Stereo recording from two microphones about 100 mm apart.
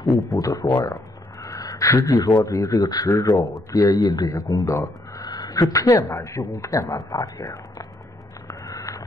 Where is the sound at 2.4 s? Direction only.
35° left (ahead or behind).